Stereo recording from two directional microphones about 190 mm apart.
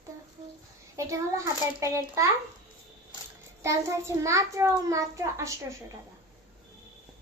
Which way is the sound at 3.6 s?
15° right (ahead or behind).